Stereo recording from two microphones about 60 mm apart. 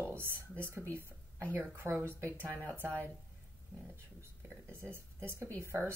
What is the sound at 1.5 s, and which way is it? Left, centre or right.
Speech, right.